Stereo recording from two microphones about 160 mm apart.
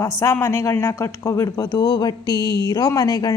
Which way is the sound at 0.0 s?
20° left (ahead or behind).